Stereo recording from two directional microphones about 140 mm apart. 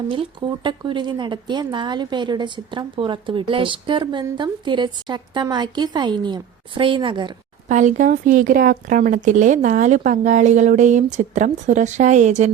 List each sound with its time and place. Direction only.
0.1 s speech: 35° right (ahead or behind)
7.7 s speech: 60° right (ahead or behind)